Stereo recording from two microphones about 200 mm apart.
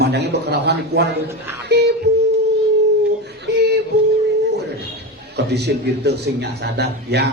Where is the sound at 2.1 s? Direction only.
55° right (ahead or behind).